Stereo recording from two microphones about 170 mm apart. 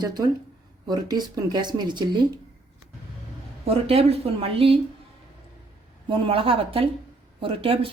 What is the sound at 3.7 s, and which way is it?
A woman's voice, 35° right (ahead or behind).